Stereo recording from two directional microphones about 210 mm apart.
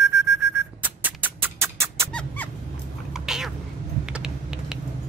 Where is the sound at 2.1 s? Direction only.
10° left (ahead or behind).